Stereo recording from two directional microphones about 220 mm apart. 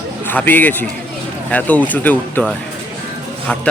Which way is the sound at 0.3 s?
10° left (ahead or behind).